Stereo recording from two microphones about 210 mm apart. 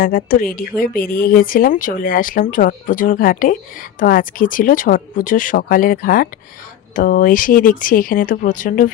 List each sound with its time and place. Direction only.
0.0 s speech: 45° left (ahead or behind)